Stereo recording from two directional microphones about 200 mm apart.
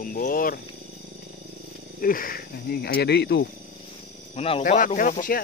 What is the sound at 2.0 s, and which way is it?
Speech, 45° left (ahead or behind).